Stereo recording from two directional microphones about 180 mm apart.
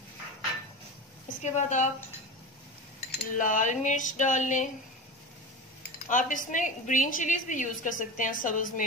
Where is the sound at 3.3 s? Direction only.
45° left (ahead or behind).